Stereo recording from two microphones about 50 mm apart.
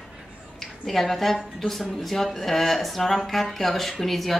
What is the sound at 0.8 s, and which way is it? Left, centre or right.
Speech, centre.